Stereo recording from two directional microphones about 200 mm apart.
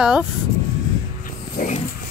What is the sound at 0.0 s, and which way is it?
Speech, 5° right (ahead or behind).